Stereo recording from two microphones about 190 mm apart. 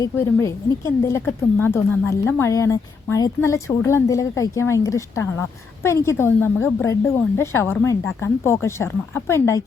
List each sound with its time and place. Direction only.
0.0 s a woman's voice: 15° left (ahead or behind)